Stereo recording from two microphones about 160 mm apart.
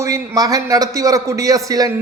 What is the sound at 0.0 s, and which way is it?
A man's voice, 20° right (ahead or behind).